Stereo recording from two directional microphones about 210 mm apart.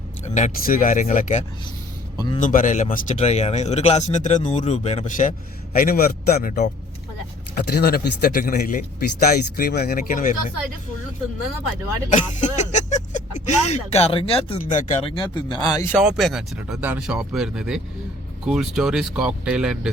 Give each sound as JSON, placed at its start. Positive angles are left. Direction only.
{"t": 0.3, "sound": "speech", "side_deg": 40}
{"t": 12.1, "sound": "a sound", "side_deg": 35}
{"t": 13.6, "sound": "speech", "side_deg": 30}
{"t": 15.0, "sound": "speech", "side_deg": 25}
{"t": 15.9, "sound": "speech", "side_deg": 0}